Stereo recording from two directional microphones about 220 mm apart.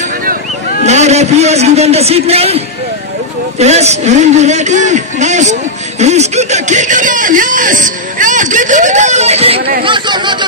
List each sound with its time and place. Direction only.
0.8 s a man's voice: 30° right (ahead or behind)
9.6 s speech: 45° right (ahead or behind)
9.8 s speech: 20° right (ahead or behind)